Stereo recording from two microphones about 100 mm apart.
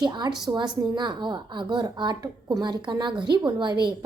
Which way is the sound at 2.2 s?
40° right (ahead or behind).